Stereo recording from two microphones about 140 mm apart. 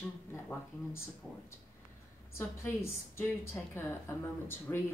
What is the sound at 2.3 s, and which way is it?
A woman's voice, 20° left (ahead or behind).